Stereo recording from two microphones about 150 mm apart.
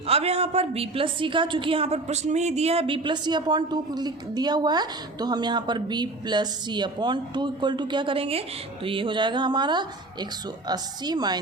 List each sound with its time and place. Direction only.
0.1 s a woman's voice: 40° right (ahead or behind); by 11.3 s 25° right (ahead or behind)